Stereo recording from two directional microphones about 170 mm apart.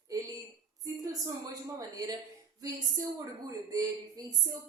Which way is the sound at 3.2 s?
20° right (ahead or behind).